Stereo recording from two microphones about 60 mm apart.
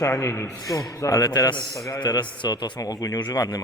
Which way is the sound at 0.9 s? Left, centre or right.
Left.